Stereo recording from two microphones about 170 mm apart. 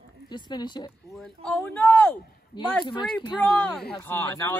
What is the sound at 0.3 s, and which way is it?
Speech, 25° left (ahead or behind).